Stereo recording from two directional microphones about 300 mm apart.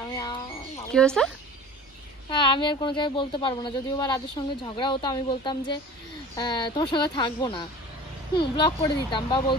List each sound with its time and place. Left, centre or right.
0.1 s a sound: centre
0.9 s speech: centre
2.2 s speech: centre